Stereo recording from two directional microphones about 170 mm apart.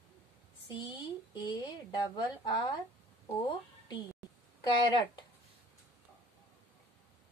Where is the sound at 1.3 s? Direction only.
25° left (ahead or behind).